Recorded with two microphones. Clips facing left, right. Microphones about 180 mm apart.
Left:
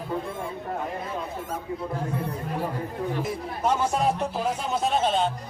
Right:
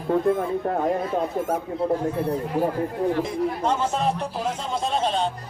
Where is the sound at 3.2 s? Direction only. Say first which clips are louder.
Right 3 dB; 10° left (ahead or behind).